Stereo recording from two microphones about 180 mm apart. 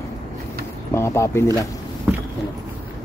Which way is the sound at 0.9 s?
15° left (ahead or behind).